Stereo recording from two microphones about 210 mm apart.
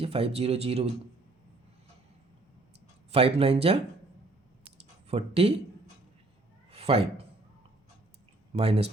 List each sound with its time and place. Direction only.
0.0 s speech: 25° right (ahead or behind)
3.1 s speech: 30° right (ahead or behind)
4.6 s a sound: 30° right (ahead or behind)
6.7 s cat: 30° right (ahead or behind)
8.5 s speech: 30° right (ahead or behind)